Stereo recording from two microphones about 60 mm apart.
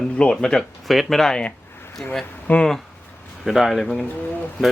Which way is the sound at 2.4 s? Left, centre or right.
Left.